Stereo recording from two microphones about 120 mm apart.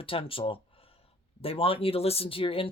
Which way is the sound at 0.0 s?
50° left (ahead or behind).